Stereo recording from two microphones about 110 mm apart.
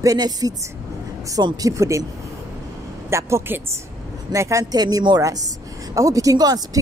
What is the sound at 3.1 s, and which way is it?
Speech, 25° right (ahead or behind).